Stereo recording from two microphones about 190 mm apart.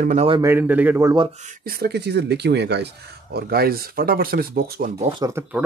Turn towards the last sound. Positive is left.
turn(degrees=-15)  # may be behind; listen again after turning